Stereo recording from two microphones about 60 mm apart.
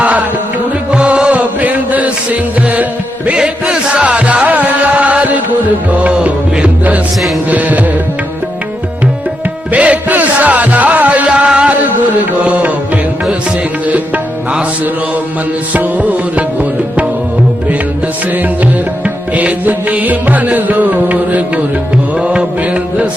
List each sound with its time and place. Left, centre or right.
0.0 s music: right
3.2 s music: centre
9.7 s music: right
15.7 s music: right
19.0 s music: right
22.2 s mantra: centre